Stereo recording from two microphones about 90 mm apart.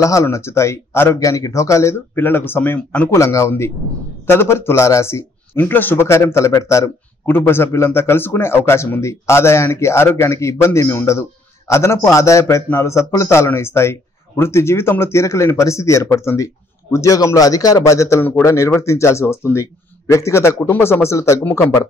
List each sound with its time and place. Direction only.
0.0 s a man's voice: 35° left (ahead or behind); by 3.1 s 20° left (ahead or behind)
3.1 s a man's voice: 35° left (ahead or behind)
21.5 s a man's voice: 20° left (ahead or behind)